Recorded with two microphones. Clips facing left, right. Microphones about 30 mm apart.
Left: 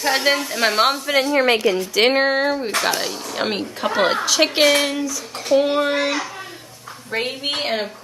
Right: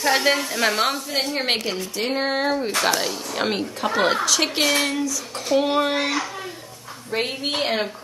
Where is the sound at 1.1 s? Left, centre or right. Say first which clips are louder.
Left 7 dB; left.